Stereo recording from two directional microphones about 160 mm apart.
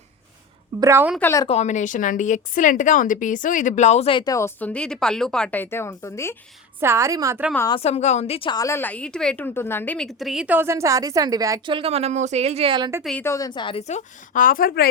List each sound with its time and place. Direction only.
0.8 s a woman's voice: 15° right (ahead or behind)
1.2 s a woman's voice: 20° left (ahead or behind)
1.5 s a woman's voice: 45° left (ahead or behind)
4.2 s a woman's voice: 20° left (ahead or behind)
6.7 s a woman's voice: 15° right (ahead or behind)
7.7 s a woman's voice: 40° left (ahead or behind); by 11.7 s 20° right (ahead or behind)
11.7 s speech: 35° right (ahead or behind)
13.0 s a woman's voice: centre (ahead or behind)
13.2 s a woman's voice: 20° left (ahead or behind)
13.8 s a woman's voice: 50° left (ahead or behind); by 14.8 s 65° left (ahead or behind)